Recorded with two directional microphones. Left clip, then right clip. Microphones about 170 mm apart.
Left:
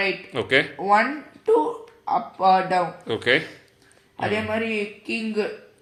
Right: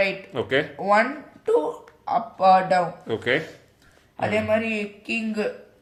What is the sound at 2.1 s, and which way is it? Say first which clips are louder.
Speech: right 1 dB; 45° right (ahead or behind).